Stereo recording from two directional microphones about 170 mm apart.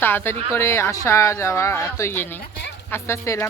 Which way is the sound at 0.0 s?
10° left (ahead or behind).